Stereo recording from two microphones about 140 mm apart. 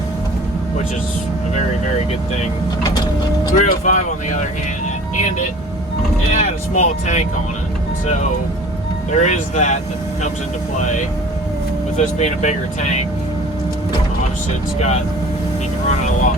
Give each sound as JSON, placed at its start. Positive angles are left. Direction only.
{"t": 3.6, "sound": "speech", "side_deg": 60}
{"t": 6.3, "sound": "speech", "side_deg": 55}
{"t": 11.9, "sound": "speech", "side_deg": 55}
{"t": 15.9, "sound": "speech", "side_deg": 60}